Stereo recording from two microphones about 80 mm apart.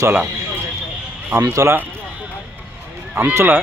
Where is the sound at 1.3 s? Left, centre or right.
Right.